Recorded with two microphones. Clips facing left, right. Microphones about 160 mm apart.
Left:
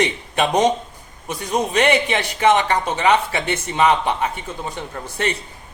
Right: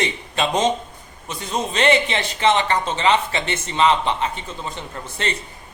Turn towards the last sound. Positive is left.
turn(degrees=10)  # may be behind; listen again after turning